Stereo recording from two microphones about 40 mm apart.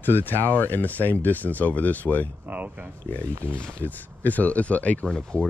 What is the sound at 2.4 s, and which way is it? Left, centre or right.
Speech, right.